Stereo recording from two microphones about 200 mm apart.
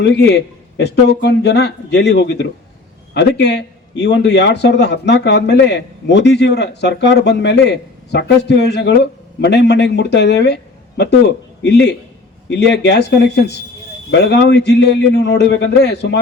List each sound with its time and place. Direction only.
0.0 s a man's voice: 60° left (ahead or behind)